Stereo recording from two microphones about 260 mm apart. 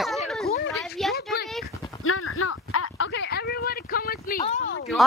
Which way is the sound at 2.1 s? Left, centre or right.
Left.